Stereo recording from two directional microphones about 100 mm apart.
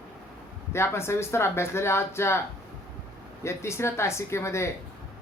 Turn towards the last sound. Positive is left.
turn(degrees=25)  # may be behind; listen again after turning